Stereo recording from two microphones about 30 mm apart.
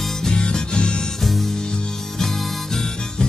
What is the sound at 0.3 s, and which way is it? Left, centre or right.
Music, left.